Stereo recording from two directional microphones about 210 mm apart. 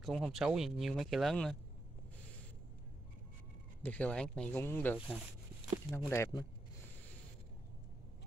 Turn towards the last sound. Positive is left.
turn(degrees=15)  # may be behind; listen again after turning